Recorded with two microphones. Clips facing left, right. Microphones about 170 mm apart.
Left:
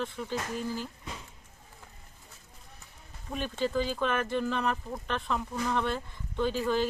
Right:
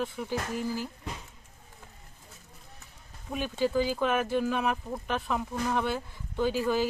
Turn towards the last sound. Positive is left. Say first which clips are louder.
# right 1 dB
turn(degrees=-5)  # may be behind; listen again after turning